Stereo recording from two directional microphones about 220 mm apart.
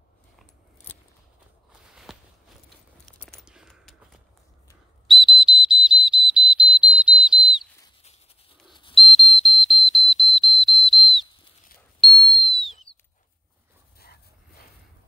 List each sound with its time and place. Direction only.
1.7 s walk: 5° right (ahead or behind)
3.2 s a sound: centre (ahead or behind)
5.0 s whistle: centre (ahead or behind)
8.9 s whistle: centre (ahead or behind)
13.9 s dog: 45° left (ahead or behind)